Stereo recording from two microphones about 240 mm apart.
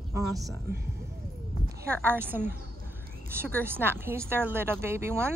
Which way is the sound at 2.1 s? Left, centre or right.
Centre.